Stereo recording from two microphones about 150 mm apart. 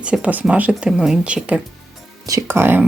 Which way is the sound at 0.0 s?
10° right (ahead or behind).